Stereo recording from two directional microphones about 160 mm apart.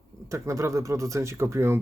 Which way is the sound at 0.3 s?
20° right (ahead or behind).